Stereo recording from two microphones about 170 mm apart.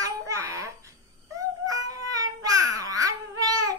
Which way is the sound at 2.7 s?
20° right (ahead or behind).